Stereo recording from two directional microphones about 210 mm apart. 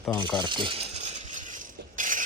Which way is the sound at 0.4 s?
25° right (ahead or behind).